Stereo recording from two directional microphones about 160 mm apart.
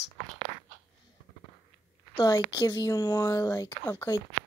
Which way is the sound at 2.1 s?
20° left (ahead or behind).